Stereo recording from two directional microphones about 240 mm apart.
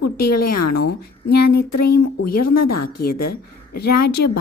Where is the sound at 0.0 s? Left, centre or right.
Left.